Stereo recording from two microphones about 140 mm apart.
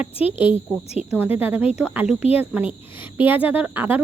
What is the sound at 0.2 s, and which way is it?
Speech, 40° left (ahead or behind).